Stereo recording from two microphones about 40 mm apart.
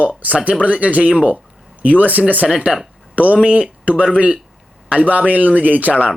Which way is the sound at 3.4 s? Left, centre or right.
Right.